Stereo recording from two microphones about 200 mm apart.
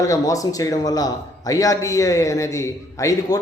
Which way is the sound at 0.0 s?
15° left (ahead or behind).